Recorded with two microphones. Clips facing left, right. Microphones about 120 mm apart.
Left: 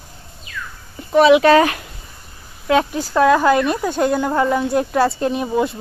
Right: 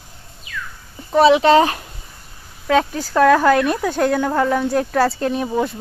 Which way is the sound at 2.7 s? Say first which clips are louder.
Even; 20° left (ahead or behind).